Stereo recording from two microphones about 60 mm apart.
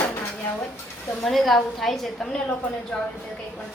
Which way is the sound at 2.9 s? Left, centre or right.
Left.